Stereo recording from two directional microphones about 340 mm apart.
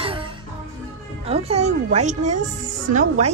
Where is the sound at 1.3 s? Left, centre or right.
Centre.